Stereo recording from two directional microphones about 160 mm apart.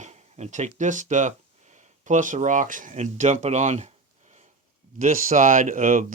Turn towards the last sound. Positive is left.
turn(degrees=-55)  # may be behind; listen again after turning